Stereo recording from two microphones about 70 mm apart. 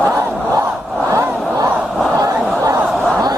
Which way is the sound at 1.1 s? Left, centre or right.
Right.